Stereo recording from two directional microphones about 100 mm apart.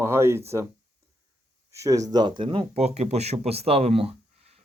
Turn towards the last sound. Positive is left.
turn(degrees=-75)  # may be behind; listen again after turning